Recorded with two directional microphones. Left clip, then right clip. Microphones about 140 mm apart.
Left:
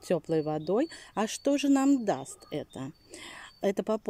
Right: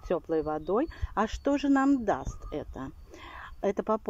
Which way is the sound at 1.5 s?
45° left (ahead or behind).